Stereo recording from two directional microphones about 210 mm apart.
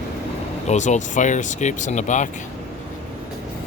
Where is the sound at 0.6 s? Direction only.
35° left (ahead or behind).